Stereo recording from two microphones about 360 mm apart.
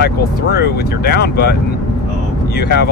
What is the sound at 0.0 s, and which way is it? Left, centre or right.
Speech, left.